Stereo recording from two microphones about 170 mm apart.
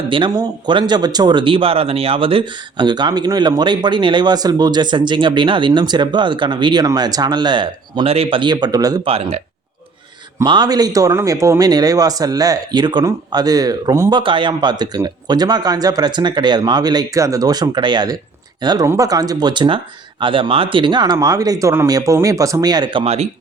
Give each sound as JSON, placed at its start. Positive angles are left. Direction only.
{"t": 0.1, "sound": "speech", "side_deg": -25}
{"t": 9.0, "sound": "speech", "side_deg": -35}